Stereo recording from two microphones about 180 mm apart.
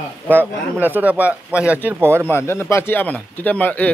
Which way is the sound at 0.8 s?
10° right (ahead or behind).